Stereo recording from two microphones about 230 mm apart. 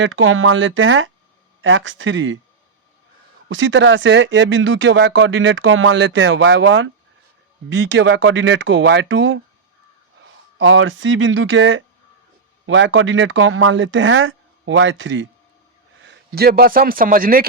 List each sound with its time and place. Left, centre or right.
0.0 s speech: right
3.5 s speech: right
10.6 s a man's voice: right